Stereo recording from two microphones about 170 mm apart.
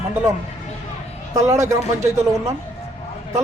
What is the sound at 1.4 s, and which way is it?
Speech, 15° right (ahead or behind).